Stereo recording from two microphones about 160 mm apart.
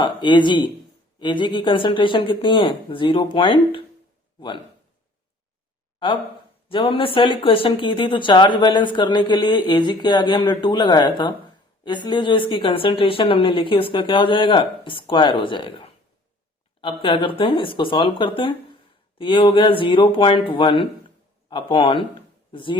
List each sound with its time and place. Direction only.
0.0 s a woman's voice: 30° left (ahead or behind)
6.7 s a woman's voice: 35° left (ahead or behind)